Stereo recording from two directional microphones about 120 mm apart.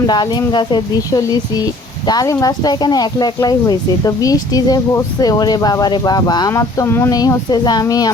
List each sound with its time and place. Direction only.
0.1 s speech: 35° left (ahead or behind)
7.1 s speech: 30° left (ahead or behind)